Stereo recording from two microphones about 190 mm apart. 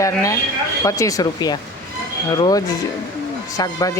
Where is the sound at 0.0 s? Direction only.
15° left (ahead or behind).